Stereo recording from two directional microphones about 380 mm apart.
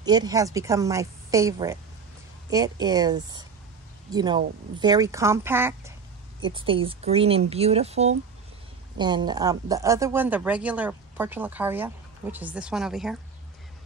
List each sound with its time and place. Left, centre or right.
0.0 s a woman's voice: centre